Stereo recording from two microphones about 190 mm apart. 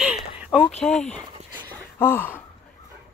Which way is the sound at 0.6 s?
35° left (ahead or behind).